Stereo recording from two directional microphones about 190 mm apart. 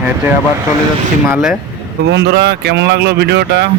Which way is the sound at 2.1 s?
65° right (ahead or behind).